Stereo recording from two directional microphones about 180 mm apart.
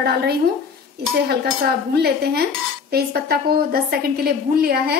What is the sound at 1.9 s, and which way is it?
A woman's voice, 60° right (ahead or behind).